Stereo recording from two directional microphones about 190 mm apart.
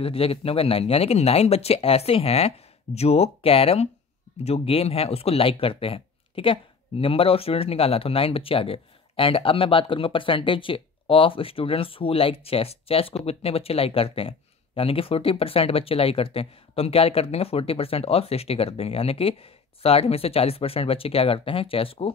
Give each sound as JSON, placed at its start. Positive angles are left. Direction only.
{"t": 0.0, "sound": "speech", "side_deg": 30}